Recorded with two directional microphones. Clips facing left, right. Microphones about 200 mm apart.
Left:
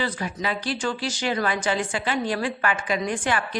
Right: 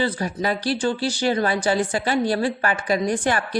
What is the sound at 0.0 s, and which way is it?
A woman's voice, 35° right (ahead or behind).